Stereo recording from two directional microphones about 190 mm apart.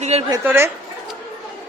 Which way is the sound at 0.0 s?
35° right (ahead or behind).